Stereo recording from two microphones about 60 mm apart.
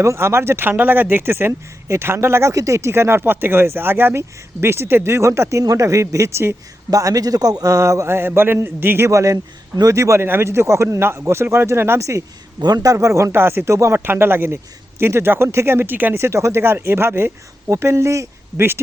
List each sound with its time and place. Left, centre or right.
0.0 s speech: right
6.9 s a man's voice: right
9.0 s a man's voice: right
10.2 s speech: right
11.0 s speech: right
12.0 s a man's voice: right
14.0 s speech: right
16.1 s speech: right
18.5 s speech: right